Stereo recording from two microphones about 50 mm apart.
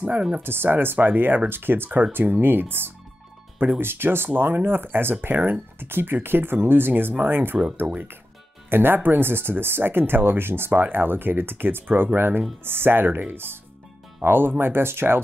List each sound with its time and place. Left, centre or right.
0.4 s speech: right
8.6 s speech: right